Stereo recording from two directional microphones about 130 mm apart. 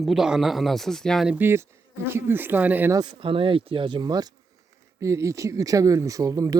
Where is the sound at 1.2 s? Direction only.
15° right (ahead or behind).